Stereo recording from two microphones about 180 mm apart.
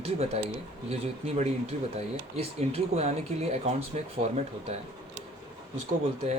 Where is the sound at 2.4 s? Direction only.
35° right (ahead or behind).